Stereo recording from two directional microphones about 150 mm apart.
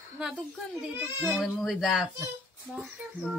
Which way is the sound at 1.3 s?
Centre (ahead or behind).